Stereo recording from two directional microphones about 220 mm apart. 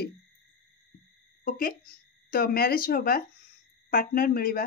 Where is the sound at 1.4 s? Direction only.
40° left (ahead or behind).